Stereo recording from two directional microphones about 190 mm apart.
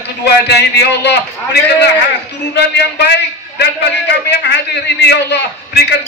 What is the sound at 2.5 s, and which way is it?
A man's voice, 60° left (ahead or behind).